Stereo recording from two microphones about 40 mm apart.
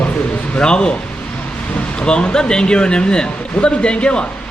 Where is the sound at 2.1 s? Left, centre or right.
Left.